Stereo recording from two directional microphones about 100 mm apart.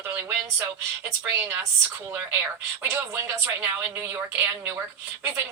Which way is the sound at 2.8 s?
25° right (ahead or behind).